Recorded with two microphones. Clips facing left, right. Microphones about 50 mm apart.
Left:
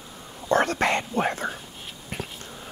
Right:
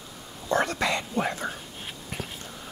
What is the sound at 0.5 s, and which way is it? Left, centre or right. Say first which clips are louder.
Whispering: left 3 dB; left.